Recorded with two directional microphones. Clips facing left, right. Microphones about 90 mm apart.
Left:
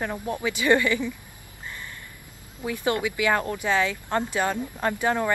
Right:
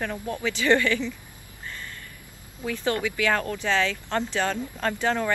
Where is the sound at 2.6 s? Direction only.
15° left (ahead or behind).